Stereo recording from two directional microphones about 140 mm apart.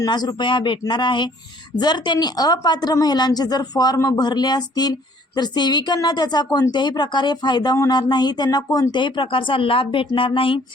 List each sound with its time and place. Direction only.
0.0 s a woman's voice: 30° left (ahead or behind)